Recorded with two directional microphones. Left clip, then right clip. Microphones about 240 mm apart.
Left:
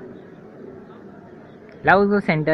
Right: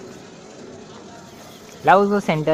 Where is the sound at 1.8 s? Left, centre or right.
Centre.